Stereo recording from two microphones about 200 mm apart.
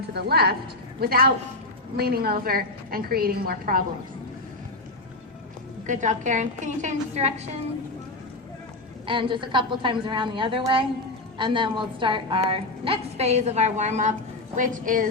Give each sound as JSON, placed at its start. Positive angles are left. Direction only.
{"t": 0.1, "sound": "a woman's voice", "side_deg": -55}
{"t": 5.8, "sound": "a woman's voice", "side_deg": -40}
{"t": 9.0, "sound": "a woman's voice", "side_deg": -25}